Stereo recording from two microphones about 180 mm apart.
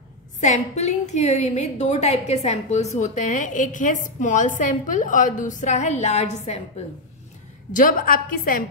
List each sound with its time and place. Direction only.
0.4 s a woman's voice: 40° left (ahead or behind)
7.7 s a woman's voice: 50° left (ahead or behind)